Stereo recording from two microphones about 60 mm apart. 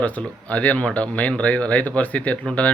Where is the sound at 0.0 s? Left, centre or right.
Left.